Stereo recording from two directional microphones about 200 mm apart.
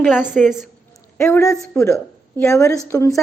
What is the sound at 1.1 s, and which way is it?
A woman's voice, 15° left (ahead or behind).